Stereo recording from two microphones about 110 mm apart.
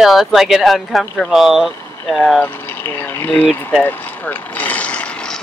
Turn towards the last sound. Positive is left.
turn(degrees=10)  # may be behind; listen again after turning